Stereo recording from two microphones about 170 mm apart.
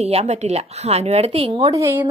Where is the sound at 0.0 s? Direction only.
40° right (ahead or behind).